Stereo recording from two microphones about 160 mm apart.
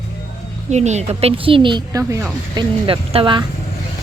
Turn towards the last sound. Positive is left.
turn(degrees=-30)  # may be behind; listen again after turning